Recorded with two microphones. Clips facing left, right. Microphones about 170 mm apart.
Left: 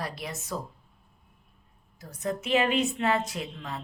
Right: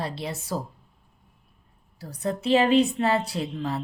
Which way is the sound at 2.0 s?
35° right (ahead or behind).